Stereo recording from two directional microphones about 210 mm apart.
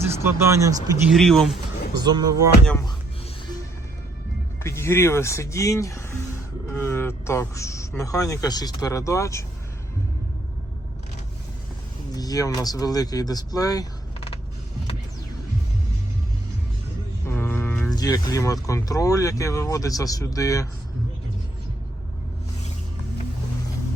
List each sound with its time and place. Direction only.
0.0 s speech: 10° right (ahead or behind)
1.1 s speech: centre (ahead or behind)
2.0 s speech: 20° right (ahead or behind)
4.6 s speech: 15° left (ahead or behind)
12.1 s speech: 15° left (ahead or behind)
17.2 s mantra: 10° left (ahead or behind)
17.9 s speech: 15° left (ahead or behind)